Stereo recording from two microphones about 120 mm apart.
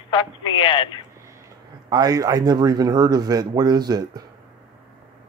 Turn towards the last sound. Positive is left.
turn(degrees=-35)  # may be behind; listen again after turning